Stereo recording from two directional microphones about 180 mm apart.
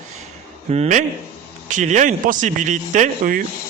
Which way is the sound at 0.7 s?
40° right (ahead or behind).